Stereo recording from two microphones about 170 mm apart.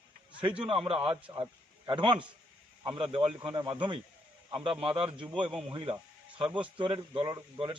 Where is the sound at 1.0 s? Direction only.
25° right (ahead or behind).